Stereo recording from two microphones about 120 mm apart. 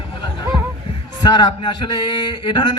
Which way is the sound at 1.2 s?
40° left (ahead or behind).